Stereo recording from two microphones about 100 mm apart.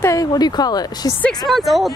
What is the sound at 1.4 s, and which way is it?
Speech, centre (ahead or behind).